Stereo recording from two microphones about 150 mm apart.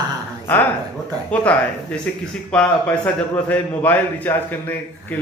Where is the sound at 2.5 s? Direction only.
10° left (ahead or behind).